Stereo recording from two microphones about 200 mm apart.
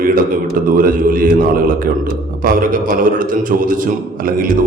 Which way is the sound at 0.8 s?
45° right (ahead or behind).